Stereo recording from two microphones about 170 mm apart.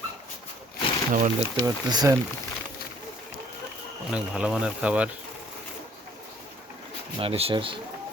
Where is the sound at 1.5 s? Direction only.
20° right (ahead or behind).